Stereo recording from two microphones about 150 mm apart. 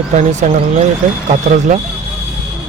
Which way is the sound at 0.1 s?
50° right (ahead or behind).